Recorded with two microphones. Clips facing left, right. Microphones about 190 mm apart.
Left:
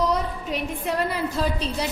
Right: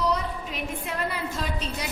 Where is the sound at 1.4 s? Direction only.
35° left (ahead or behind).